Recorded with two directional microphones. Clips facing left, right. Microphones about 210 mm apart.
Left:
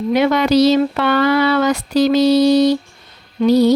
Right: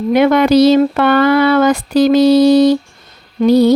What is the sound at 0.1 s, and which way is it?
Speech, 55° right (ahead or behind).